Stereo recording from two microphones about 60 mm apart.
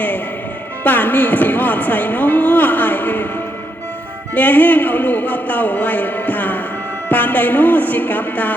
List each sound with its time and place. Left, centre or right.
0.9 s speech: left
4.4 s speech: left